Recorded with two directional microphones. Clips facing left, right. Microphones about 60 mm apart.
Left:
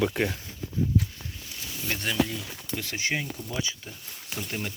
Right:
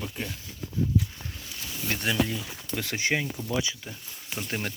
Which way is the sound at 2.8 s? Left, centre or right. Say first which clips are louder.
Right 3 dB; right.